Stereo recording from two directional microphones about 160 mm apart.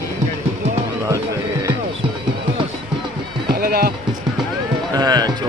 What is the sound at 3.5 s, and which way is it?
Music, 75° right (ahead or behind).